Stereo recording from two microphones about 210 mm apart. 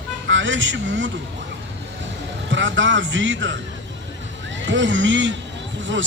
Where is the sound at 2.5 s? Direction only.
60° right (ahead or behind).